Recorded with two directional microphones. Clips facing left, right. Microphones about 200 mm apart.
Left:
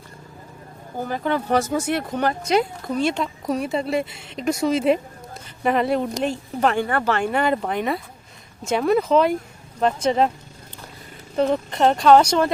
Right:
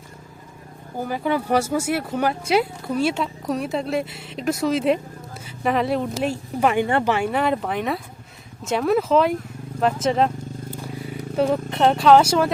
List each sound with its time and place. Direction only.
0.9 s speech: 10° right (ahead or behind)
7.2 s speech: centre (ahead or behind)